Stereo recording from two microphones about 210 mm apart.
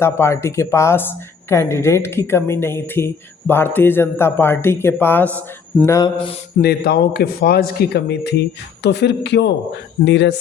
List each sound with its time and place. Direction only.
0.0 s a woman's voice: 10° left (ahead or behind)
6.6 s a man's voice: 50° left (ahead or behind)